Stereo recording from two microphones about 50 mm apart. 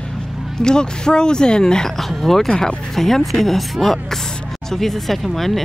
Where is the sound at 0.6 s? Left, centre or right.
Centre.